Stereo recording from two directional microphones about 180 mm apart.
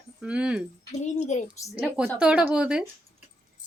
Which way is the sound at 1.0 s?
40° left (ahead or behind).